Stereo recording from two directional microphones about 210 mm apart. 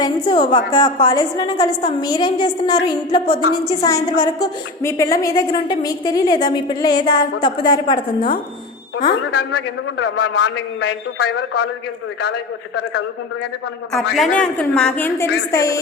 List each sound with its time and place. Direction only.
0.0 s a woman's voice: 25° left (ahead or behind)
9.3 s a man's voice: 90° left
14.1 s a man's voice: centre (ahead or behind)